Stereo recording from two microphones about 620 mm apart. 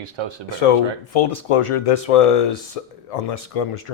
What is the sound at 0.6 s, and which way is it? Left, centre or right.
Speech, left.